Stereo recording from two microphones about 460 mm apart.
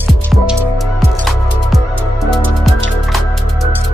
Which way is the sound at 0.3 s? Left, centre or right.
Centre.